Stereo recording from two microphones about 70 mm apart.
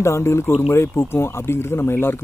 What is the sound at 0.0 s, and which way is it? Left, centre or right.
Speech, left.